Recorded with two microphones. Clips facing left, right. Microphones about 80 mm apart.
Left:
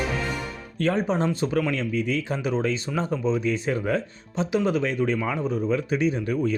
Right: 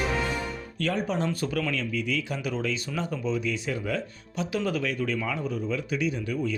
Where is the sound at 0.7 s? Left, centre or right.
Left.